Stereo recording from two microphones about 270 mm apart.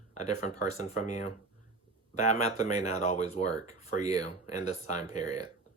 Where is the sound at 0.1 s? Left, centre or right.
Left.